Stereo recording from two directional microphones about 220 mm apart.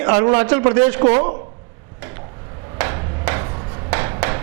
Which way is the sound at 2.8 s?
15° right (ahead or behind).